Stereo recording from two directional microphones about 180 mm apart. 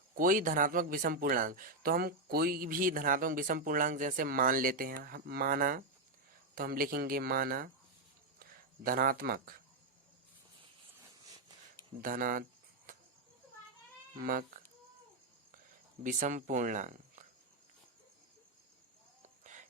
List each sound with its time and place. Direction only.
0.2 s speech: 50° right (ahead or behind)
11.9 s speech: 50° right (ahead or behind)
14.2 s speech: 50° right (ahead or behind)
16.0 s speech: 45° right (ahead or behind)